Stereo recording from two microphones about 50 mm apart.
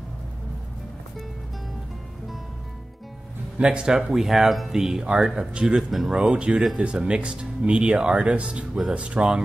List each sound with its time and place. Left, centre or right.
3.5 s speech: right
5.8 s speech: centre
6.3 s speech: centre